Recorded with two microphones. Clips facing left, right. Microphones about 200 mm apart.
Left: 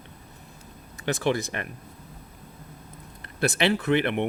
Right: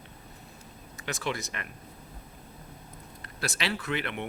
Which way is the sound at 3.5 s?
55° left (ahead or behind).